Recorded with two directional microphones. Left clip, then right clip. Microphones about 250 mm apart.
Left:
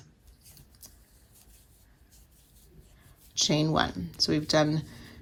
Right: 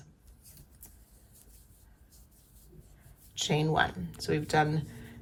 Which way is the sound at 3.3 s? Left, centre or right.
Left.